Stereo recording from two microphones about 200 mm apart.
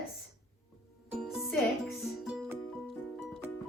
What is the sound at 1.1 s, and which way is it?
Music, centre (ahead or behind).